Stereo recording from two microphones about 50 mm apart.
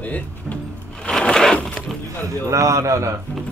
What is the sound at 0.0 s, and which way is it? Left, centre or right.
Speech, left.